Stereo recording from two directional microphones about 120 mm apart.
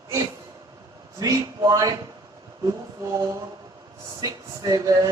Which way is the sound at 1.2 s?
25° right (ahead or behind).